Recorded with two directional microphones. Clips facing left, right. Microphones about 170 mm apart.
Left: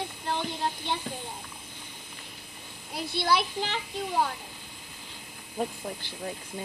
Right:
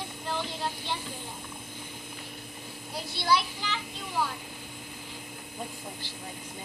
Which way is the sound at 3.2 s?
55° left (ahead or behind).